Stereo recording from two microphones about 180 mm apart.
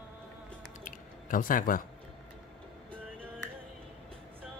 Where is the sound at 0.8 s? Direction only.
50° left (ahead or behind).